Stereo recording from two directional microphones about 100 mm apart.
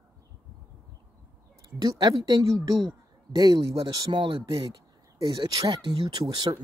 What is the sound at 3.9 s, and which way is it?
Speech, 45° right (ahead or behind).